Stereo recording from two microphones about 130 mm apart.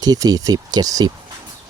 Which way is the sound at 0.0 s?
30° right (ahead or behind).